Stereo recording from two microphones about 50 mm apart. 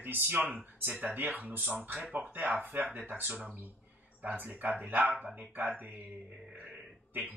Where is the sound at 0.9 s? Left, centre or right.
Right.